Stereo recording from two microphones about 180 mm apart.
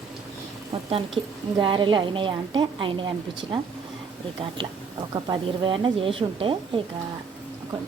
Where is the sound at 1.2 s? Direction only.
30° right (ahead or behind).